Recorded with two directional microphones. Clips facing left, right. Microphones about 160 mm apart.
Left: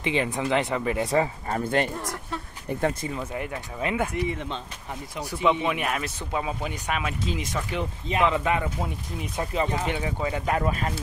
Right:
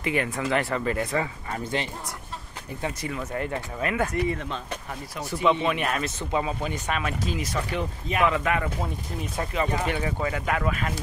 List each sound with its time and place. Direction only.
0.0 s speech: 20° left (ahead or behind)
1.1 s speech: 35° left (ahead or behind)
1.6 s speech: 55° left (ahead or behind)
3.2 s speech: 10° left (ahead or behind); by 9.9 s 30° left (ahead or behind)
9.9 s speech: 15° left (ahead or behind)
10.3 s speech: 30° left (ahead or behind)